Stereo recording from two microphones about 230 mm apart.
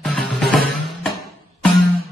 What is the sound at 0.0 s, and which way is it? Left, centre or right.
Music, centre.